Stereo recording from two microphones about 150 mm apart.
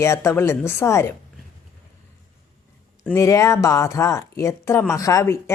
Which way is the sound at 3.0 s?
20° left (ahead or behind).